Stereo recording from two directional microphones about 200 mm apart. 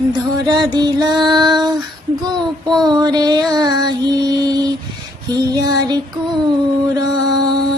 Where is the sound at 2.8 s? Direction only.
20° right (ahead or behind).